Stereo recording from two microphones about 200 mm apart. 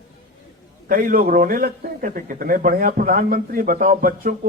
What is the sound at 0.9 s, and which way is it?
A man's voice, 45° right (ahead or behind).